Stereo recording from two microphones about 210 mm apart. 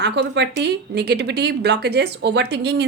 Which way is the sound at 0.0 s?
55° right (ahead or behind).